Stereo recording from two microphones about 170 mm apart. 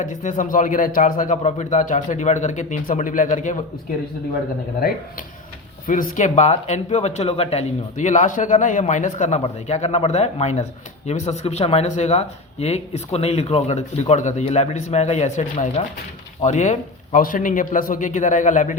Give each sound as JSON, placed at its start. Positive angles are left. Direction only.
{"t": 0.0, "sound": "a man's voice", "side_deg": 45}
{"t": 5.9, "sound": "a man's voice", "side_deg": 50}